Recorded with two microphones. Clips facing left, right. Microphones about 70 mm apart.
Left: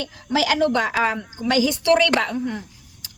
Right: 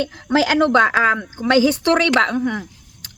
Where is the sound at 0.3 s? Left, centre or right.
Right.